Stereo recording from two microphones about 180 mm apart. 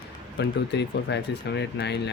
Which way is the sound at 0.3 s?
70° left (ahead or behind).